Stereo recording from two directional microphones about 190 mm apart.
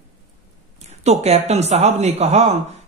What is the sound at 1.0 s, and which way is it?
Speech, 35° right (ahead or behind).